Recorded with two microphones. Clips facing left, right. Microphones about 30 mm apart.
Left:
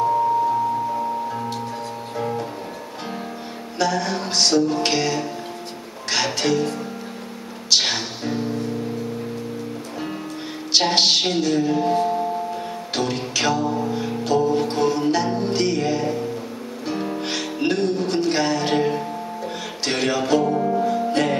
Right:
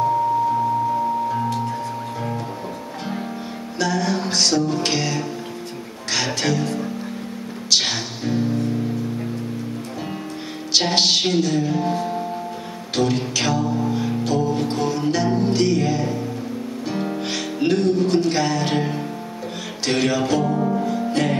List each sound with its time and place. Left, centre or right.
3.7 s speech: centre
4.3 s music: centre
7.7 s music: centre
10.7 s speech: centre
12.9 s music: centre
17.2 s music: centre
20.6 s music: centre